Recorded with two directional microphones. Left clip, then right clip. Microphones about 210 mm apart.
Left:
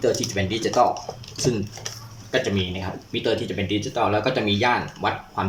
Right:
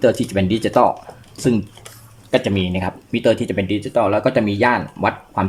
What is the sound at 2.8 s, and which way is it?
Speech, 45° right (ahead or behind).